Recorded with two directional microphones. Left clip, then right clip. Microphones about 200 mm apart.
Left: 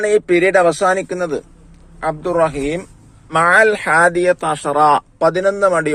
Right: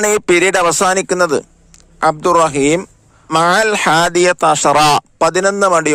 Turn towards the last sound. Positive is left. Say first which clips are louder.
# right 2 dB
turn(degrees=-55)  # may be behind; listen again after turning